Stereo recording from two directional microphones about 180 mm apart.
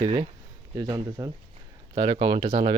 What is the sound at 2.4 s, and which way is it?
Speech, 40° right (ahead or behind).